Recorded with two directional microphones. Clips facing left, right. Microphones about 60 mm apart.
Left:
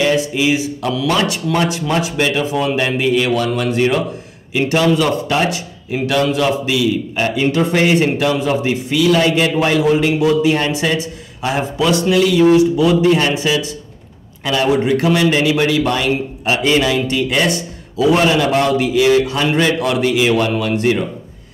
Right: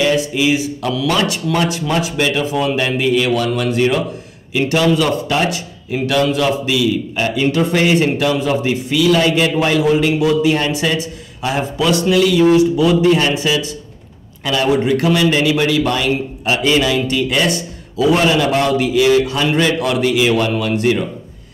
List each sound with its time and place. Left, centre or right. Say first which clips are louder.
0.0 s a man's voice: even; left